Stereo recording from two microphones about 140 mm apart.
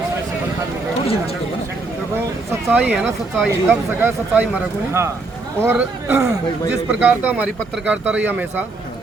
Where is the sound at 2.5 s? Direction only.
10° right (ahead or behind).